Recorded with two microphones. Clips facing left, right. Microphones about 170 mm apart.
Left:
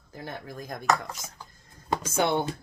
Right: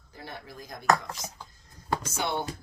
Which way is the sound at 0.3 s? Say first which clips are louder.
Left 5 dB; 50° left (ahead or behind).